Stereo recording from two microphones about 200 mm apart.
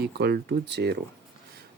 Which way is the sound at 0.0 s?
55° right (ahead or behind).